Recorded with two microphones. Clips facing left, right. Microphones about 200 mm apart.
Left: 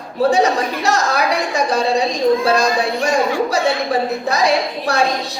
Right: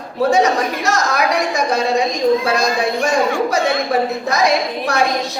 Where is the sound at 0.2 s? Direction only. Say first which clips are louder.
Even; 35° left (ahead or behind).